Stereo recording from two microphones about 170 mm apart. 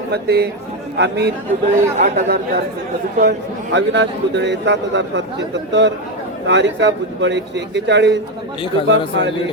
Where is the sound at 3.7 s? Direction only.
90° right.